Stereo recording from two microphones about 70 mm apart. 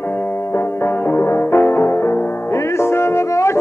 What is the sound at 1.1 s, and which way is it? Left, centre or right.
Music, left.